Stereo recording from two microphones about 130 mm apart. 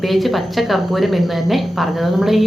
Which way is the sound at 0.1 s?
Centre (ahead or behind).